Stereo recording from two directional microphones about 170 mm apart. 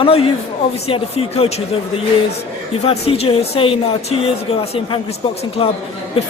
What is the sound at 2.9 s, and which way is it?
Speech, 35° left (ahead or behind).